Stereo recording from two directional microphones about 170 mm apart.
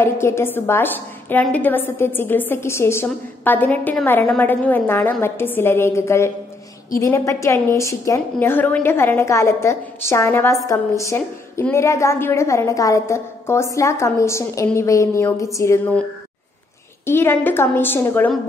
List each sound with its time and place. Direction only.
0.0 s a woman's voice: 15° left (ahead or behind)
17.0 s a woman's voice: 15° left (ahead or behind)